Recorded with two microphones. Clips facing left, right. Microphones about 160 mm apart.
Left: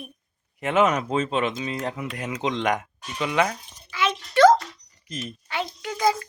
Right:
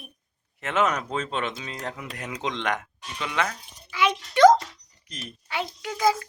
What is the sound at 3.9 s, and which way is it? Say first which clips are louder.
Music: right 1 dB; 15° right (ahead or behind).